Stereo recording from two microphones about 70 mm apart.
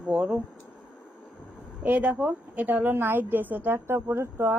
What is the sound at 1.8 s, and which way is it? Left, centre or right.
A woman's voice, right.